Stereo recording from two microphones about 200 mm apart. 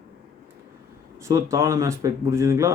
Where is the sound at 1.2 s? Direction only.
15° right (ahead or behind).